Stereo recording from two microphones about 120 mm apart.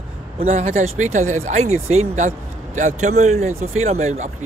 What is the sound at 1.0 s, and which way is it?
Speech, 85° right.